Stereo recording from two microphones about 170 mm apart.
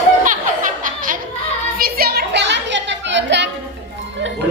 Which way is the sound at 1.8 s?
60° right (ahead or behind).